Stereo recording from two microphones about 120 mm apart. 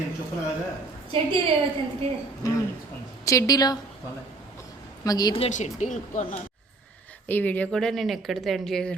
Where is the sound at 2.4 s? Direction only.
25° left (ahead or behind).